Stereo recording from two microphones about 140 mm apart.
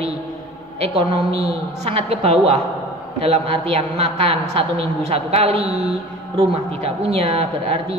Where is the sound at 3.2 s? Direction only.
45° right (ahead or behind).